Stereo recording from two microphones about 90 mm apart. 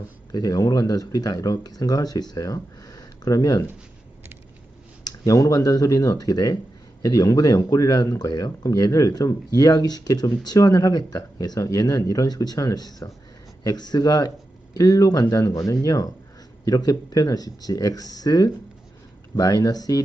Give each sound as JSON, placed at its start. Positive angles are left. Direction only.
{"t": 0.3, "sound": "speech", "side_deg": 40}
{"t": 5.0, "sound": "speech", "side_deg": 40}